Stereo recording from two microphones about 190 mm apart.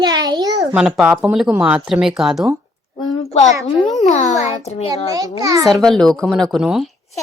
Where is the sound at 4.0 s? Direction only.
40° left (ahead or behind).